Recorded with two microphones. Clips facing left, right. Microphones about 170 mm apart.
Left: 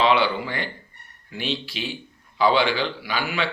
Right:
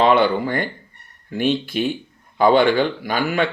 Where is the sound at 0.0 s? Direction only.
50° right (ahead or behind).